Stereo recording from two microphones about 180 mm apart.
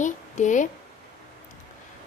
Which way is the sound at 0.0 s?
45° left (ahead or behind).